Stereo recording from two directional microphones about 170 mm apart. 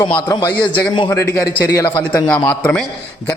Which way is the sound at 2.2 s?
5° left (ahead or behind).